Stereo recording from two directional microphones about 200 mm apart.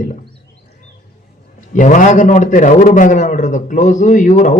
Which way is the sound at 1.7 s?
40° left (ahead or behind).